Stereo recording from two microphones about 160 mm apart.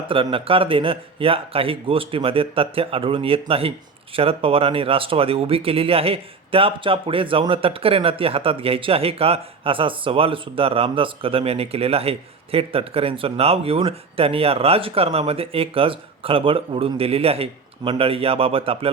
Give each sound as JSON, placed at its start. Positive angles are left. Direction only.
{"t": 0.1, "sound": "speech", "side_deg": -35}